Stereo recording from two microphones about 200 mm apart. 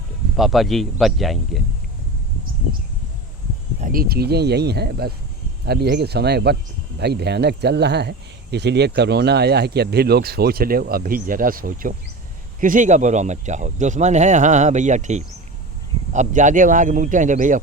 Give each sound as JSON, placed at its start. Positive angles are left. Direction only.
{"t": 0.3, "sound": "speech", "side_deg": 0}
{"t": 3.8, "sound": "speech", "side_deg": -45}